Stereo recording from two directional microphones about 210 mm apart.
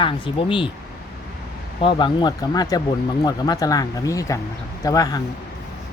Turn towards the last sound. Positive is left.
turn(degrees=15)  # may be behind; listen again after turning